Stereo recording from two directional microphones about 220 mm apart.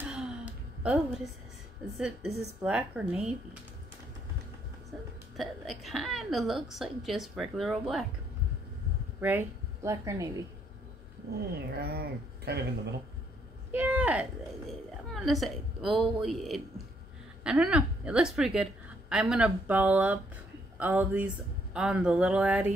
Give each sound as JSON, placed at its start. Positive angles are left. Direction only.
{"t": 0.1, "sound": "a sound", "side_deg": -5}
{"t": 2.0, "sound": "a woman's voice", "side_deg": 0}
{"t": 5.4, "sound": "a woman's voice", "side_deg": 0}
{"t": 9.2, "sound": "speech", "side_deg": -10}
{"t": 11.5, "sound": "speech", "side_deg": -45}
{"t": 13.7, "sound": "a woman's voice", "side_deg": -5}